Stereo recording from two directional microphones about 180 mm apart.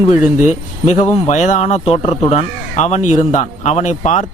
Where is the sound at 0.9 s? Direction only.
40° left (ahead or behind).